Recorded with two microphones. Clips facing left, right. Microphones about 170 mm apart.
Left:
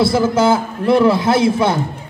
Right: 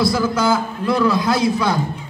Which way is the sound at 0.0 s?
25° left (ahead or behind).